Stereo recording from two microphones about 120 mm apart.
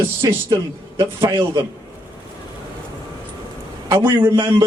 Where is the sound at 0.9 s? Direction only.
20° right (ahead or behind).